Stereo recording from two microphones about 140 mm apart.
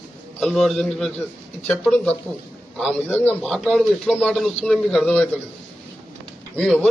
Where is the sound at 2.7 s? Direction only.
10° left (ahead or behind).